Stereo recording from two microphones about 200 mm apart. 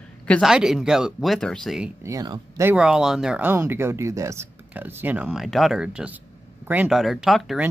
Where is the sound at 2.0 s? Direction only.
20° right (ahead or behind).